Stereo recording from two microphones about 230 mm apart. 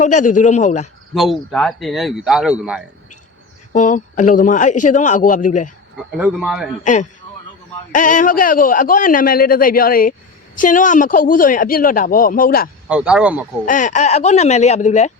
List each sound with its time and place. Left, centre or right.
0.0 s a man's voice: left
1.1 s speech: centre
3.7 s a man's voice: left
6.1 s speech: centre
6.8 s a man's voice: left
12.9 s speech: centre
13.7 s a man's voice: left